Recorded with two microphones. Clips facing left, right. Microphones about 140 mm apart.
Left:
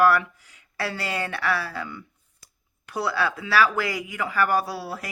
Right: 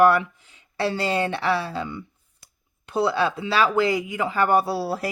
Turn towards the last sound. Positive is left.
turn(degrees=-30)  # may be behind; listen again after turning